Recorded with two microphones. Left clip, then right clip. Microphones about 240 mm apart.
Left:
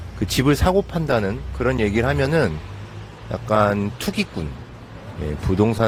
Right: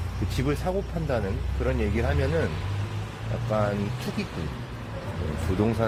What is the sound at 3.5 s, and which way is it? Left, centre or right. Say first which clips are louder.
Speech: left 9 dB; left.